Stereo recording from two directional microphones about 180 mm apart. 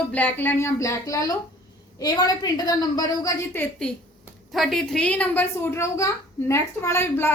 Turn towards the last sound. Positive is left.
turn(degrees=15)  # may be behind; listen again after turning